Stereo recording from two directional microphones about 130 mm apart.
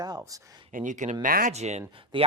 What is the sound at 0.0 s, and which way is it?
Speech, 30° right (ahead or behind).